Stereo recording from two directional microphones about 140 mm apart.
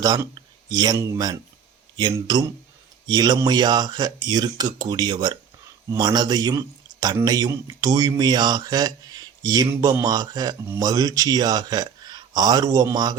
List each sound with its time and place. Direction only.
0.0 s a man's voice: 30° right (ahead or behind)